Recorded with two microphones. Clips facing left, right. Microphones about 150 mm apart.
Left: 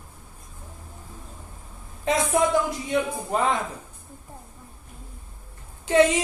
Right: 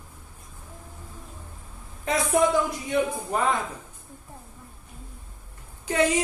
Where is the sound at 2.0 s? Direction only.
20° left (ahead or behind).